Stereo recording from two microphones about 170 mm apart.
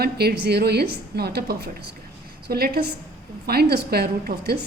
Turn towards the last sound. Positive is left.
turn(degrees=-70)  # may be behind; listen again after turning